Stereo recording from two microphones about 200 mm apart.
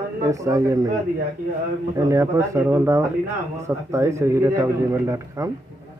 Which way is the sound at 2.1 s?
15° right (ahead or behind).